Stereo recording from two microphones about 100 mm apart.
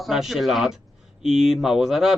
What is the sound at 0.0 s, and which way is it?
Speech, 5° right (ahead or behind).